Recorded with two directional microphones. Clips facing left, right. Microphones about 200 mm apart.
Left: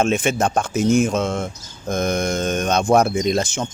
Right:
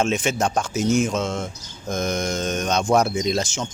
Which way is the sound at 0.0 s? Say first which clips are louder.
Left 3 dB; 55° left (ahead or behind).